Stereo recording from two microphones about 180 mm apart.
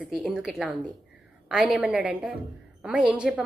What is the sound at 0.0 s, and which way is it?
A woman's voice, 5° right (ahead or behind).